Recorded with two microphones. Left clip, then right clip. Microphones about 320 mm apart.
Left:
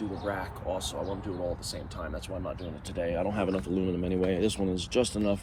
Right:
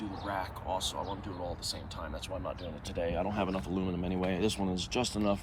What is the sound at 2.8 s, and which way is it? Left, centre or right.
Speech, centre.